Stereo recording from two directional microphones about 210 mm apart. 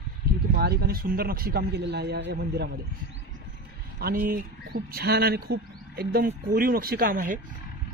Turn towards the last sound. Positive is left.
turn(degrees=-40)  # may be behind; listen again after turning